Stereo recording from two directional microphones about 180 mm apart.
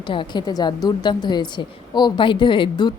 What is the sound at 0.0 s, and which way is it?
A woman's voice, 25° left (ahead or behind).